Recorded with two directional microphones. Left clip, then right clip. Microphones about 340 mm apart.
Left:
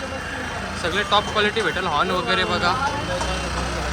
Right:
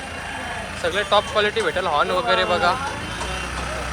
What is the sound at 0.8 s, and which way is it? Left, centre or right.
Speech, centre.